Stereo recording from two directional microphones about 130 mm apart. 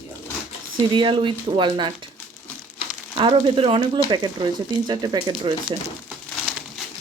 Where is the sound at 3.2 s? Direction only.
40° right (ahead or behind).